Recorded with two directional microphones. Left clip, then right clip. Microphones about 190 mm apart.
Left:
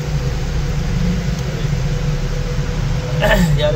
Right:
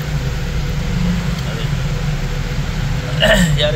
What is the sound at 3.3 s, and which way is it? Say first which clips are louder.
Speech: right 2 dB; 50° left (ahead or behind).